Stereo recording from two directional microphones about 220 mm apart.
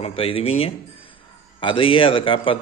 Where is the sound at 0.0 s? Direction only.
25° left (ahead or behind).